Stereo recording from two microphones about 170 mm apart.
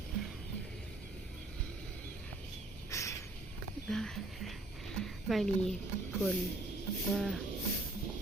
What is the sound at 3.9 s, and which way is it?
Speech, centre (ahead or behind).